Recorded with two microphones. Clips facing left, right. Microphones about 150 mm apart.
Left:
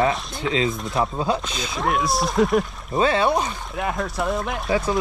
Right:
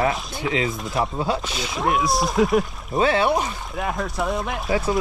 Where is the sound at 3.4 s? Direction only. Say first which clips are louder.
Left 1 dB; centre (ahead or behind).